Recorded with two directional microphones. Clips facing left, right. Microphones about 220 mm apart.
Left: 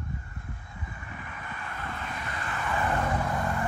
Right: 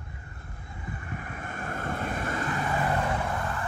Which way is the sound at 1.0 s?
45° right (ahead or behind).